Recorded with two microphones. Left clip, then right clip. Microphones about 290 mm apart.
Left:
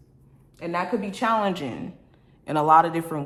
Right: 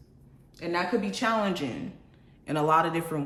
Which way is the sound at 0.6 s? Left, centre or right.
Centre.